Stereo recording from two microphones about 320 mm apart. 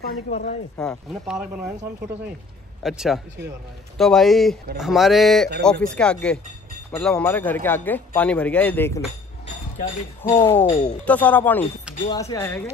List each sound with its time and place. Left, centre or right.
0.7 s speech: centre
2.8 s speech: centre
10.2 s speech: centre
10.7 s speech: left
11.1 s speech: centre